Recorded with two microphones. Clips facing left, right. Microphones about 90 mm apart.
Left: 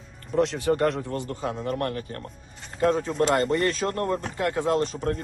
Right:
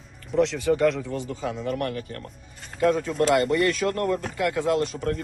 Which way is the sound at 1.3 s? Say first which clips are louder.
Even; 60° left (ahead or behind).